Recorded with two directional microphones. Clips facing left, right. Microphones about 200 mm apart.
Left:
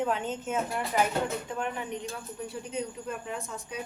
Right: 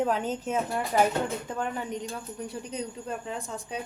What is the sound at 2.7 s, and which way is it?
Speech, 35° right (ahead or behind).